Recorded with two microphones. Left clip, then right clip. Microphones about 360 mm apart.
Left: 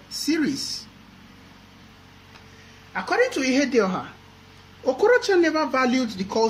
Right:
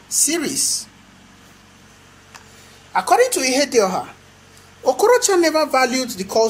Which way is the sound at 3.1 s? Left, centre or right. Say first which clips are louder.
Right 5 dB; centre.